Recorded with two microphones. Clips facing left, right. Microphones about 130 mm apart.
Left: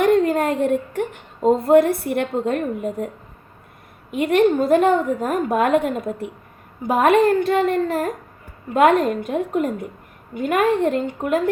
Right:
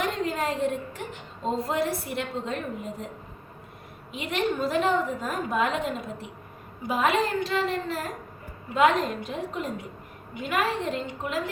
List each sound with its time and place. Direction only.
0.0 s a woman's voice: 55° left (ahead or behind)
4.1 s a woman's voice: 55° left (ahead or behind)